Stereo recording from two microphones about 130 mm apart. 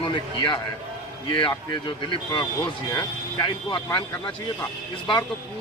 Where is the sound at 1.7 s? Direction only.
40° left (ahead or behind).